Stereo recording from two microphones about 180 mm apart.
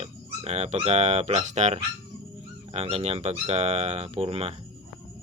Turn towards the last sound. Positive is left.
turn(degrees=-35)  # may be behind; listen again after turning